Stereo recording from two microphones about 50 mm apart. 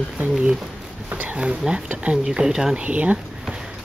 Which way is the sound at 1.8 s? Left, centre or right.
Right.